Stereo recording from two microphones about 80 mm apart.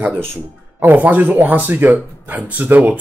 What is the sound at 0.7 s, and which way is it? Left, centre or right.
Speech, right.